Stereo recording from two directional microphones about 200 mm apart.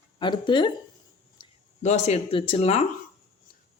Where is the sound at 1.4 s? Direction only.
20° left (ahead or behind).